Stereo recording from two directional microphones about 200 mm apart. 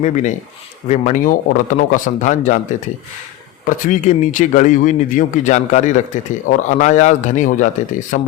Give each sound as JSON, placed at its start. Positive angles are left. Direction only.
{"t": 0.0, "sound": "speech", "side_deg": 35}
{"t": 3.7, "sound": "speech", "side_deg": 40}